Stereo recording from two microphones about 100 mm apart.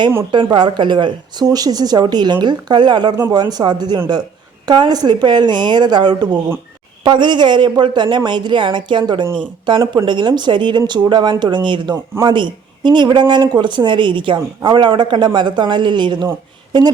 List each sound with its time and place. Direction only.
0.4 s speech: 50° right (ahead or behind)